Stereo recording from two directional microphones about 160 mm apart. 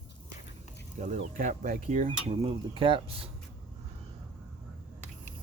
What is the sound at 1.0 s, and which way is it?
Speech, 50° right (ahead or behind).